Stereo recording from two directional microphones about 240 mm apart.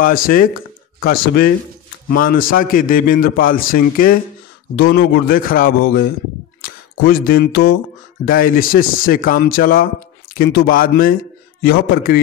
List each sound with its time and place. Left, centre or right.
0.0 s a man's voice: left